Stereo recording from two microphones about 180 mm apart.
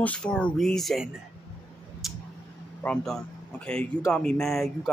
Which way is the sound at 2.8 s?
5° left (ahead or behind).